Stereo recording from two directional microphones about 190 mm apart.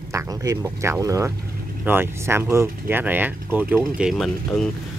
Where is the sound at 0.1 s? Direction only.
15° right (ahead or behind).